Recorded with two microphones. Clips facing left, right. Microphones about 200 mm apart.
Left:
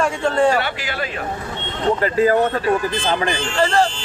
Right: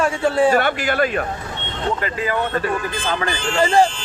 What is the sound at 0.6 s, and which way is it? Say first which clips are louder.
Speech: right 6 dB; 50° right (ahead or behind).